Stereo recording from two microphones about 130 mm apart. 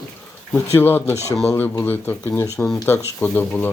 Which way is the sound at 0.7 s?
15° left (ahead or behind).